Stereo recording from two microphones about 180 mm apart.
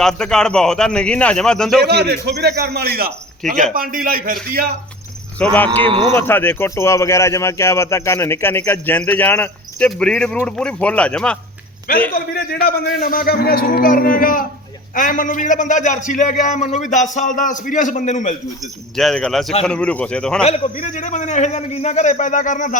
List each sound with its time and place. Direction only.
0.0 s a man's voice: 5° left (ahead or behind)
1.8 s a man's voice: 65° right (ahead or behind)
3.4 s a man's voice: 45° right (ahead or behind)
5.4 s speech: 5° left (ahead or behind)
5.8 s speech: 30° right (ahead or behind)
6.1 s a man's voice: 15° left (ahead or behind)
12.1 s a man's voice: 55° left (ahead or behind)
18.9 s a man's voice: centre (ahead or behind)
20.4 s a man's voice: 35° left (ahead or behind)